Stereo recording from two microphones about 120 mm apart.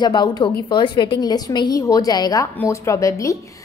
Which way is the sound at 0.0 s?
35° left (ahead or behind).